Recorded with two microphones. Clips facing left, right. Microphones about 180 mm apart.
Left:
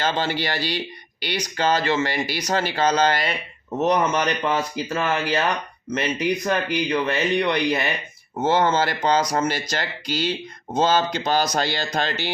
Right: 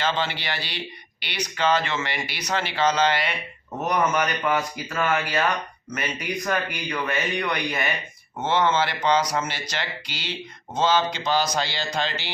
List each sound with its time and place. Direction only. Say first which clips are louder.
0.0 s speech: left 3 dB; 40° left (ahead or behind)